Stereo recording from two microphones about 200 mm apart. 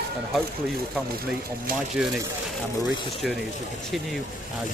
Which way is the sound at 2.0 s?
5° right (ahead or behind).